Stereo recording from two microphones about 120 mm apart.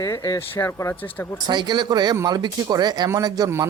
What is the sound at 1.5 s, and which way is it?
Speech, 35° right (ahead or behind).